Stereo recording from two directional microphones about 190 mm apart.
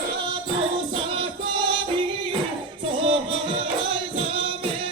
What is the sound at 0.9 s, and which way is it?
Music, 30° right (ahead or behind).